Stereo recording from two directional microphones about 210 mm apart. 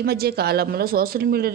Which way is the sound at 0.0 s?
50° right (ahead or behind).